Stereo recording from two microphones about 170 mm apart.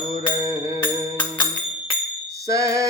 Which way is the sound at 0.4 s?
20° right (ahead or behind).